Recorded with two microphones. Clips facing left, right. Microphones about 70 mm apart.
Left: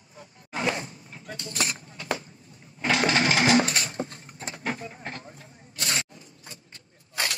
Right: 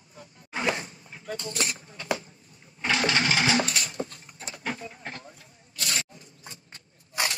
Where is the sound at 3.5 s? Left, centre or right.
Left.